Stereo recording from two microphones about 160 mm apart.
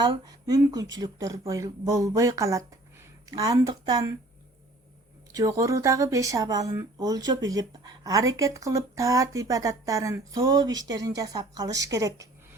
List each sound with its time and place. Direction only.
0.0 s speech: 25° right (ahead or behind)
5.3 s speech: 20° right (ahead or behind)